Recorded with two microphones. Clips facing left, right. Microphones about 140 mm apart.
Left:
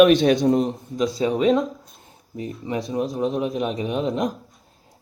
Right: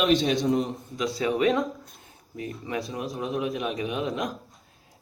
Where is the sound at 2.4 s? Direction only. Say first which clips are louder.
Left 4 dB; 25° left (ahead or behind).